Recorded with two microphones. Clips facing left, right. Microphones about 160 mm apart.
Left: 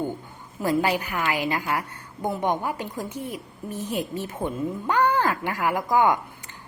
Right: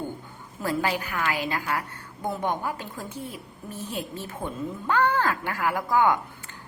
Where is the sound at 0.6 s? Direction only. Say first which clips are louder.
Left 4 dB; 15° left (ahead or behind).